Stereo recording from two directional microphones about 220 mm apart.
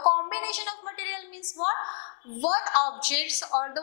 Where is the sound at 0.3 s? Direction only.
10° left (ahead or behind).